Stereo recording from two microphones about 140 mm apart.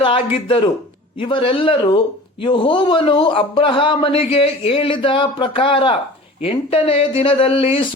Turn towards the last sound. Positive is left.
turn(degrees=40)  # may be behind; listen again after turning